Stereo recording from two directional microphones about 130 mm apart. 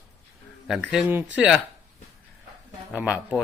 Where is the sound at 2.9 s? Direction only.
10° right (ahead or behind).